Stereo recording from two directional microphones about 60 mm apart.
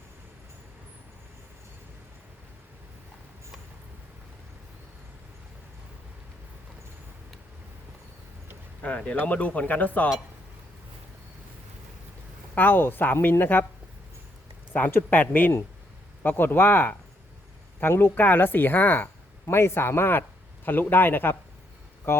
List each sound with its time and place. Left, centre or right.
8.8 s speech: left
12.5 s speech: left
14.7 s speech: left
19.5 s speech: left